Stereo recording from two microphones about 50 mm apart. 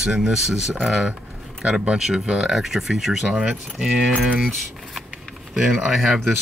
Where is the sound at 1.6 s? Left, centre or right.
Right.